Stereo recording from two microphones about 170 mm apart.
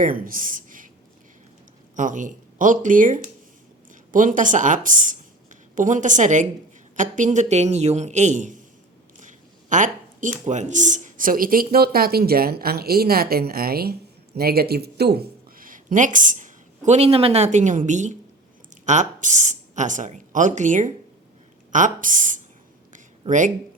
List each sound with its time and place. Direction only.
0.0 s speech: 55° right (ahead or behind)
2.0 s a man's voice: 50° right (ahead or behind)
9.2 s a sound: 50° right (ahead or behind)
10.4 s a man's voice: 45° right (ahead or behind)
23.2 s speech: 30° right (ahead or behind)